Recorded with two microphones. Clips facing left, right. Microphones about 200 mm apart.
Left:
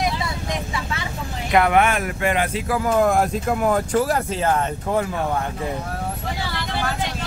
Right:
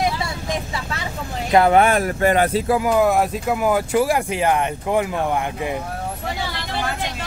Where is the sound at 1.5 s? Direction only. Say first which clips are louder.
Right 3 dB; 30° right (ahead or behind).